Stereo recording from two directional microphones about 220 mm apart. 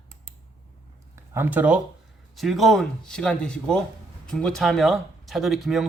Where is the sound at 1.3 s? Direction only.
10° right (ahead or behind).